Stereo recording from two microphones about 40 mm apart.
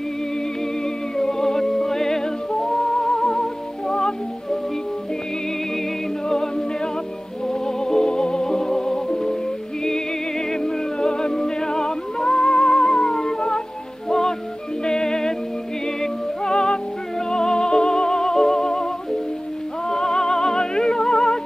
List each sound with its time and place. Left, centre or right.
1.1 s music: centre
6.2 s music: centre
10.5 s music: centre
19.9 s music: centre